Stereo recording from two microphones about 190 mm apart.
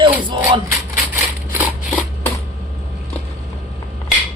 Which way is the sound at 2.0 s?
10° left (ahead or behind).